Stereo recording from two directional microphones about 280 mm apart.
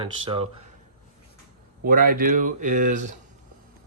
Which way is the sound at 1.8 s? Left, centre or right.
Right.